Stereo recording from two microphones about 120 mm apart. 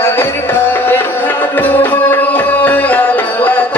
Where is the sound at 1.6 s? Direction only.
15° left (ahead or behind).